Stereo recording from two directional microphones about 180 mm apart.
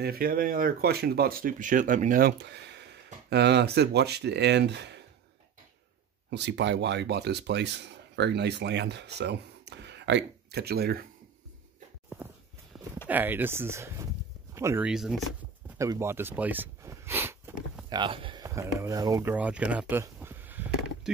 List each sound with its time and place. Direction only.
0.0 s speech: 55° right (ahead or behind)
6.3 s speech: 75° right (ahead or behind); by 11.1 s 60° right (ahead or behind)
12.7 s a sound: centre (ahead or behind)
13.1 s speech: 10° right (ahead or behind)
14.9 s speech: centre (ahead or behind)
15.8 s speech: 15° right (ahead or behind)
17.8 s speech: 25° right (ahead or behind)
19.3 s a sound: 5° right (ahead or behind)